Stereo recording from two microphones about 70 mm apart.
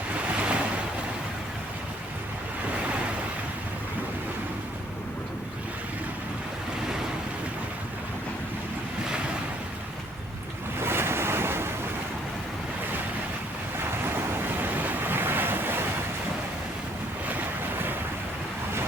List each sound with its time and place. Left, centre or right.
0.1 s waves: centre
10.8 s waves: right
14.0 s waves: right